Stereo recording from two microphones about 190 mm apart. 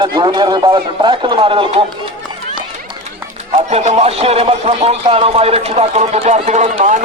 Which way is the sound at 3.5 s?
35° right (ahead or behind).